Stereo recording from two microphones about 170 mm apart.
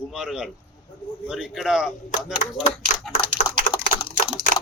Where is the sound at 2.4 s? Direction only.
50° left (ahead or behind).